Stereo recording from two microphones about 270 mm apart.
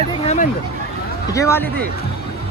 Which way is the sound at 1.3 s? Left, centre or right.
Centre.